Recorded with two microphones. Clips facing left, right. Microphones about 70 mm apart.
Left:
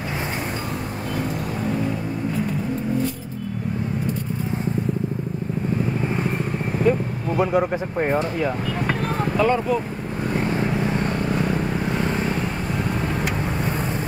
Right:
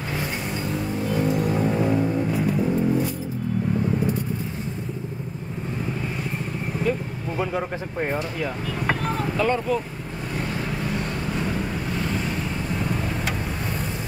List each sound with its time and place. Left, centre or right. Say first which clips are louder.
6.9 s speech: left 6 dB; centre
9.4 s speech: left 3 dB; centre